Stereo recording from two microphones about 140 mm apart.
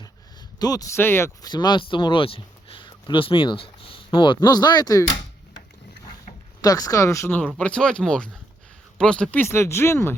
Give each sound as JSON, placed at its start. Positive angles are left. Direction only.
{"t": 0.6, "sound": "speech", "side_deg": 25}
{"t": 1.5, "sound": "speech", "side_deg": 30}
{"t": 6.6, "sound": "speech", "side_deg": 25}
{"t": 7.3, "sound": "speech", "side_deg": 10}